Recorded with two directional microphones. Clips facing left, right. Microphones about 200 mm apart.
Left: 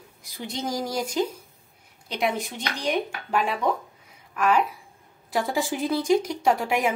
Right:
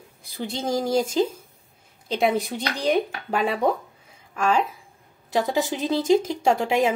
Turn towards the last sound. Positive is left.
turn(degrees=-25)  # may be behind; listen again after turning